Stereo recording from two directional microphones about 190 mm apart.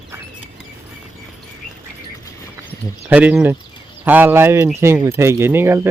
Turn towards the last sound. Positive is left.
turn(degrees=-10)  # may be behind; listen again after turning